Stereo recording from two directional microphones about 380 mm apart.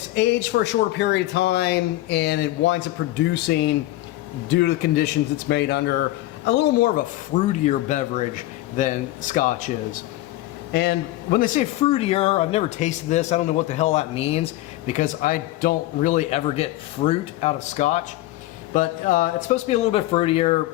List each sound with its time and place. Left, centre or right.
0.1 s a man's voice: left